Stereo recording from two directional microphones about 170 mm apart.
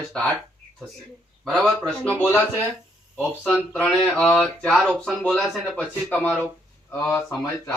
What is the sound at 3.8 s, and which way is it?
Speech, 5° left (ahead or behind).